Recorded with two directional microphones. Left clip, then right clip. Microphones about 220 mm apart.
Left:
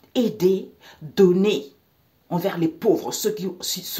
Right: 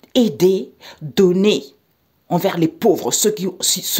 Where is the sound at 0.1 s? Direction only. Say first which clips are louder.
Right 5 dB; 50° right (ahead or behind).